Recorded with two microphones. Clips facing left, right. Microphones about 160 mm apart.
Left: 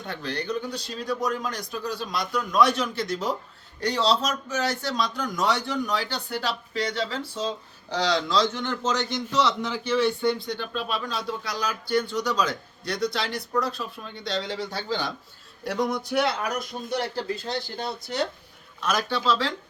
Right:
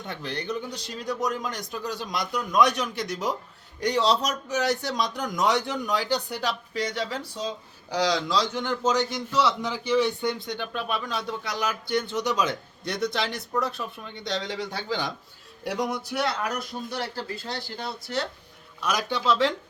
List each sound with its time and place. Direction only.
0.1 s a man's voice: 20° right (ahead or behind); by 16.3 s centre (ahead or behind)
17.2 s speech: 20° left (ahead or behind)
18.8 s a man's voice: 15° right (ahead or behind)